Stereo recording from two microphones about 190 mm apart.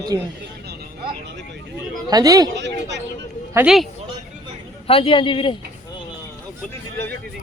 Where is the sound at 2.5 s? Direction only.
65° right (ahead or behind).